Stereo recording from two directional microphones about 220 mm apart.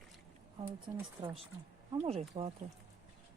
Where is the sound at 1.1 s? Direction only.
20° right (ahead or behind).